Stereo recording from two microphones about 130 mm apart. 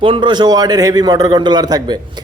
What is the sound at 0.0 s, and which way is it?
A man's voice, 40° right (ahead or behind).